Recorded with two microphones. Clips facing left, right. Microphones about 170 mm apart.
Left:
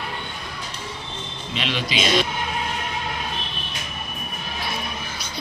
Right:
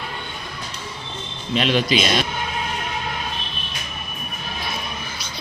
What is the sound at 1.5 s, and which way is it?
Speech, 45° right (ahead or behind).